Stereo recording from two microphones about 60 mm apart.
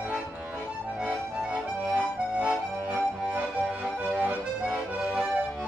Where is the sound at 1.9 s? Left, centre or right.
Right.